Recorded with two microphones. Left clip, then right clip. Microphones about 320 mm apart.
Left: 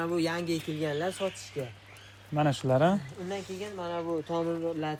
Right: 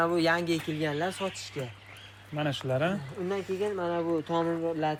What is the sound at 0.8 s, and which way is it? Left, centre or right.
Speech, right.